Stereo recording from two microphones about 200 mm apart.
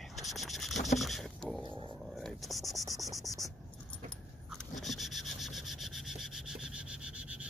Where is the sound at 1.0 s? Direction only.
Centre (ahead or behind).